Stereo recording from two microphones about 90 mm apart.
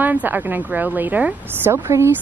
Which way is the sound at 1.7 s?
30° right (ahead or behind).